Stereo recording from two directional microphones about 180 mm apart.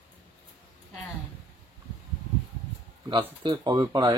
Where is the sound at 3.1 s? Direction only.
25° right (ahead or behind).